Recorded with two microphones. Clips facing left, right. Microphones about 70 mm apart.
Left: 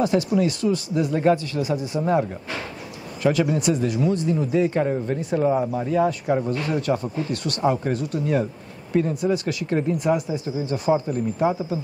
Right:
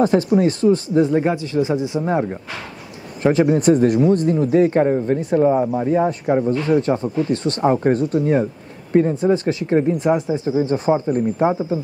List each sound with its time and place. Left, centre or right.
0.0 s speech: right
1.2 s speech: centre
5.5 s speech: centre